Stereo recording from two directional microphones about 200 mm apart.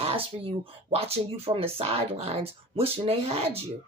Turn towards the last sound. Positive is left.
turn(degrees=-30)  # may be behind; listen again after turning